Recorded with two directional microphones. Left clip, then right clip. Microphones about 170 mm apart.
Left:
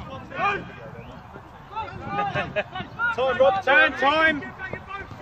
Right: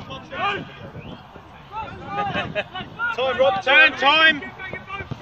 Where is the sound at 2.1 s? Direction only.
55° left (ahead or behind).